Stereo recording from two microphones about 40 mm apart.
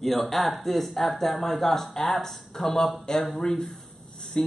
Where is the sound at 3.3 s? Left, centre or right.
Left.